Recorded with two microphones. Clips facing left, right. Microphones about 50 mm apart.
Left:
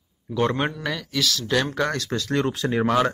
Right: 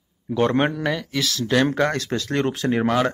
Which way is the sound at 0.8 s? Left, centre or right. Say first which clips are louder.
Right 2 dB; centre.